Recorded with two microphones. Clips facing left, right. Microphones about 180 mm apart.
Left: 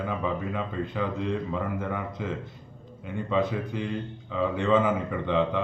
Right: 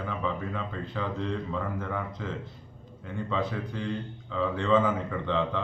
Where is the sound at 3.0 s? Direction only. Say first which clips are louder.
Left 4 dB; 15° left (ahead or behind).